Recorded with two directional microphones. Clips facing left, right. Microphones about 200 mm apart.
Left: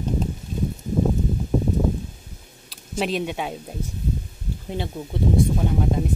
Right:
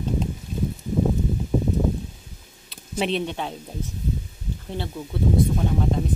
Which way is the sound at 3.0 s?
10° left (ahead or behind).